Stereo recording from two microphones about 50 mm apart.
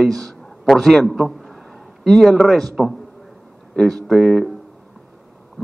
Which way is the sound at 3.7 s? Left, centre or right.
Centre.